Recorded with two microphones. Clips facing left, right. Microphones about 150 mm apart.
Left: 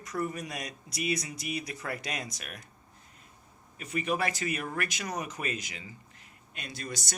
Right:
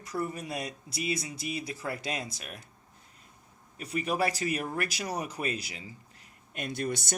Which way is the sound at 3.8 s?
35° right (ahead or behind).